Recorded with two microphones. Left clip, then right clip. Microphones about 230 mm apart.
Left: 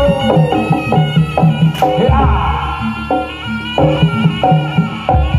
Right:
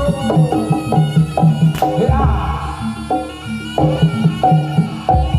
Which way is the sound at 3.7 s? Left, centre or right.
Right.